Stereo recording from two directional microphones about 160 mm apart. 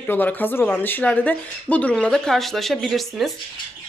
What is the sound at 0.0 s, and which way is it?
Speech, 10° left (ahead or behind).